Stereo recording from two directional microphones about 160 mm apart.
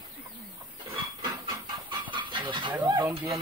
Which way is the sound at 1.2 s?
30° right (ahead or behind).